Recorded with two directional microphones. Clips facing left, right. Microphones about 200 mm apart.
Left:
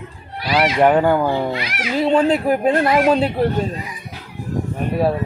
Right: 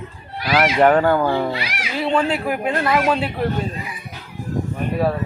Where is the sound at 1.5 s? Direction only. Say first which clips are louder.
Left 2 dB; 10° right (ahead or behind).